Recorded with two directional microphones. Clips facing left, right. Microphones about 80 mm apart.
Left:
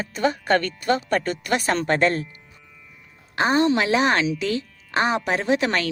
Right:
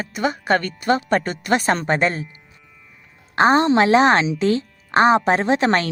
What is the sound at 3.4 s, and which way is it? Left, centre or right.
Speech, right.